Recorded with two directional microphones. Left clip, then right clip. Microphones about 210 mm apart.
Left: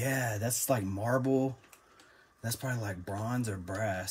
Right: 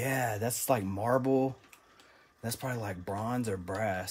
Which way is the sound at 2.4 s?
25° right (ahead or behind).